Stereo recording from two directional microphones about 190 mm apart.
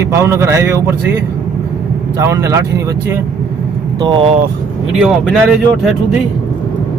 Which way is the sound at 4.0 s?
25° right (ahead or behind).